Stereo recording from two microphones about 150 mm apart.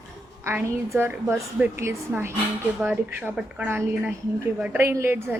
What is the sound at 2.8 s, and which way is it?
A woman's voice, 5° right (ahead or behind).